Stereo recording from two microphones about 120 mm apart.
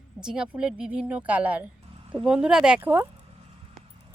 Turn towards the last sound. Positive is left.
turn(degrees=-20)  # may be behind; listen again after turning